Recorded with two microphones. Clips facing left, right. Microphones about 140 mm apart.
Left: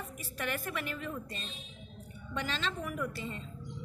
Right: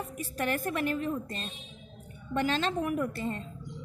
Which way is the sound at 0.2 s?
45° right (ahead or behind).